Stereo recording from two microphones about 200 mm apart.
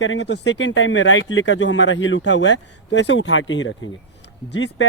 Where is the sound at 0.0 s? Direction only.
60° left (ahead or behind).